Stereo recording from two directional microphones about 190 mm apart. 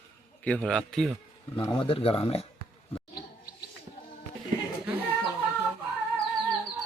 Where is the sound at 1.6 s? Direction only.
25° left (ahead or behind).